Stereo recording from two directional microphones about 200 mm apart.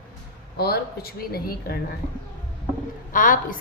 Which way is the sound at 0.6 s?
50° left (ahead or behind).